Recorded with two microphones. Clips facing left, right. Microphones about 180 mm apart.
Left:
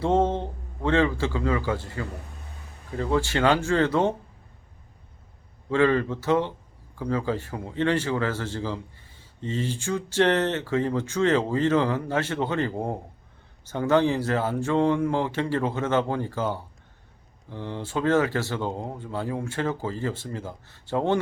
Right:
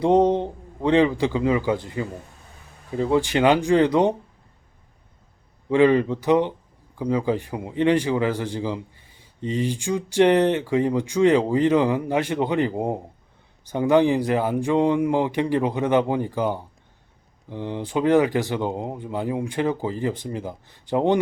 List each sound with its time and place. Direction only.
0.0 s a man's voice: 15° right (ahead or behind)
5.6 s speech: 15° right (ahead or behind)